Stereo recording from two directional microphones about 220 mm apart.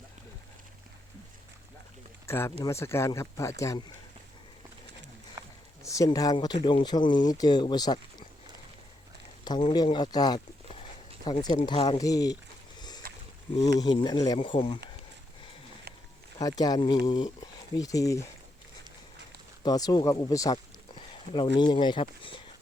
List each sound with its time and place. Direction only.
2.2 s speech: 10° left (ahead or behind)
5.4 s a sound: 15° right (ahead or behind)
5.8 s speech: 15° left (ahead or behind)
9.4 s speech: 20° left (ahead or behind)
13.0 s a sound: 40° right (ahead or behind)
13.6 s speech: 15° left (ahead or behind)
16.4 s speech: 15° left (ahead or behind)
19.6 s speech: 15° left (ahead or behind)